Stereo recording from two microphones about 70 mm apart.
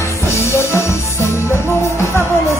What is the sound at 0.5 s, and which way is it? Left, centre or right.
Music, left.